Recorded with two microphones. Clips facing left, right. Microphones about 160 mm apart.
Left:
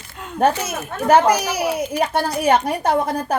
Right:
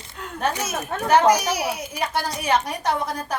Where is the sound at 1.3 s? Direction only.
60° left (ahead or behind).